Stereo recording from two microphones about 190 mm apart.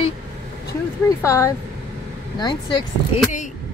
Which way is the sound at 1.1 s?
15° left (ahead or behind).